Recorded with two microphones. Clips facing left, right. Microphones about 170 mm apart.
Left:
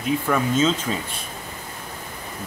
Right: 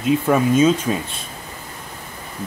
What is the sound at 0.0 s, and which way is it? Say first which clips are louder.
Speech: right 5 dB; 15° right (ahead or behind).